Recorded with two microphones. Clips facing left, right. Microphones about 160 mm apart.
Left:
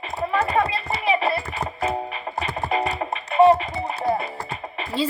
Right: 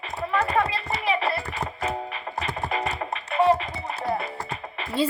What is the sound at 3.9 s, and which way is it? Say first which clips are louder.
Music: left 4 dB; 30° left (ahead or behind).